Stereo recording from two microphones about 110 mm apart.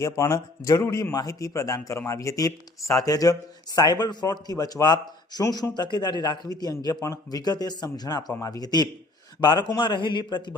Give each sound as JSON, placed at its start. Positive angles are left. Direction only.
{"t": 0.0, "sound": "a man's voice", "side_deg": 25}